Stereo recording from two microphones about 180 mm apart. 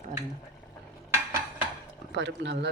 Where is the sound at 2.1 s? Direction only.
75° right (ahead or behind).